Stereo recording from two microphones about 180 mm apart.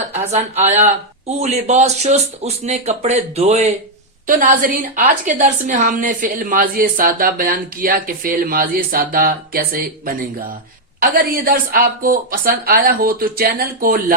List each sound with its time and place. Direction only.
0.3 s speech: 35° right (ahead or behind)
4.3 s a woman's voice: 50° right (ahead or behind)